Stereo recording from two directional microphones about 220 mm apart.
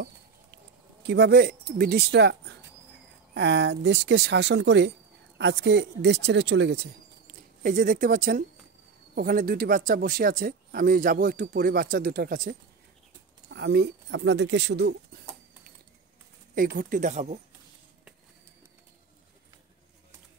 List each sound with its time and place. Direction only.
1.0 s speech: 50° right (ahead or behind)
3.3 s speech: 55° right (ahead or behind)
16.5 s speech: 40° right (ahead or behind)